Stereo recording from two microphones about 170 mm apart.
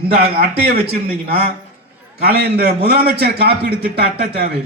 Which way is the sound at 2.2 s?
65° right (ahead or behind).